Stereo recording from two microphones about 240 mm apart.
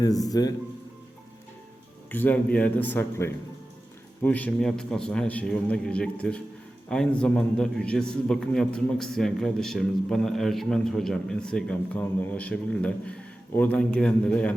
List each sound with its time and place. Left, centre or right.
0.3 s a man's voice: centre
2.0 s a man's voice: centre